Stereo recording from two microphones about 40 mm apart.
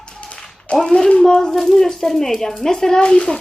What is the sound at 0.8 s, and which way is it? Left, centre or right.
Speech, centre.